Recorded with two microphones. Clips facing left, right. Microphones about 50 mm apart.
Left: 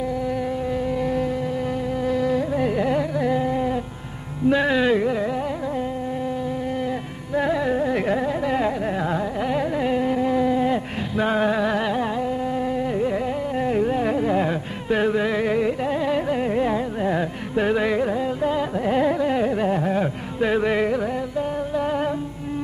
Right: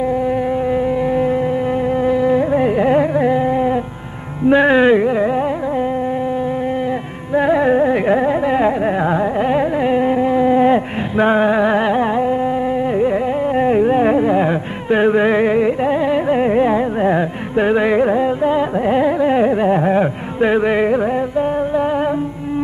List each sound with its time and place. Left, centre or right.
0.1 s music: right
7.3 s carnatic music: right